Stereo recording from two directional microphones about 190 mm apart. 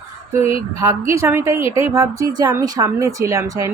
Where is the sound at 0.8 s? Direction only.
15° right (ahead or behind).